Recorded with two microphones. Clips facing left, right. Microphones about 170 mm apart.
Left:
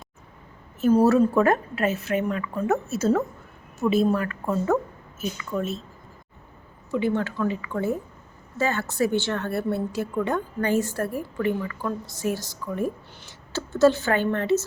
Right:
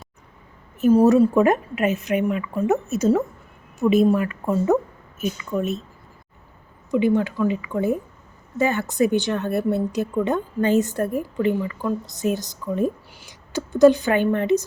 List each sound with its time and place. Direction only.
0.8 s a woman's voice: 15° right (ahead or behind)
6.9 s a woman's voice: 15° right (ahead or behind)